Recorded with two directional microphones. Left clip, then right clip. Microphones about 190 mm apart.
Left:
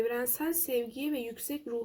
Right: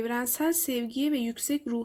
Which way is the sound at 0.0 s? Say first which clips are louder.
Right 3 dB; 50° right (ahead or behind).